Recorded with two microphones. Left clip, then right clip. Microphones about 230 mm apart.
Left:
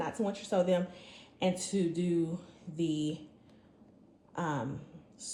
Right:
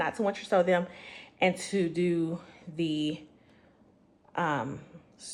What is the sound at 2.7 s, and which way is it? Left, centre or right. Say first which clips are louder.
Speech: right 3 dB; centre.